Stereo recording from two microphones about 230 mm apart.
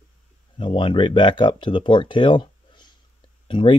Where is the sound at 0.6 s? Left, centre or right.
Left.